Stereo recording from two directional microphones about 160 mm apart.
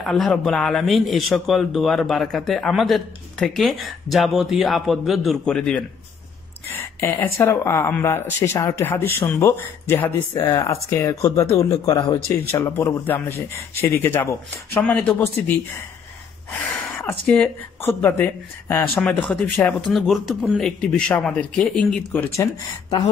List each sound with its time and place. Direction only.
0.0 s a man's voice: centre (ahead or behind)
16.4 s a sound: 10° left (ahead or behind)
17.3 s a man's voice: 10° left (ahead or behind)
22.4 s speech: 25° left (ahead or behind)